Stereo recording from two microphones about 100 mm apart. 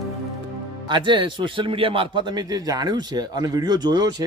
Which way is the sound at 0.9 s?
50° right (ahead or behind).